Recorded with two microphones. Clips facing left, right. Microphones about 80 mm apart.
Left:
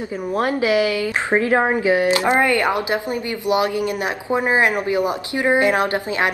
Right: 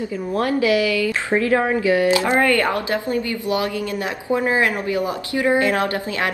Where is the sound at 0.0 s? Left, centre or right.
Left.